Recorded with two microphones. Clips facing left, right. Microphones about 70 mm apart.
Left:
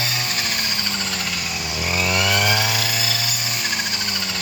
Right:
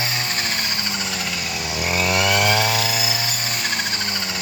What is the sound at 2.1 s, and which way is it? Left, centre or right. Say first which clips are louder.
Chainsaw: right 2 dB; centre.